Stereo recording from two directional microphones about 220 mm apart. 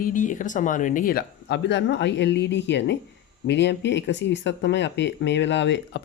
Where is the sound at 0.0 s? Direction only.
35° left (ahead or behind).